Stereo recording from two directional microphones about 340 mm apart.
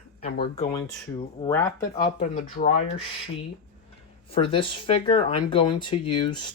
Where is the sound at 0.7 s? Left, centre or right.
Centre.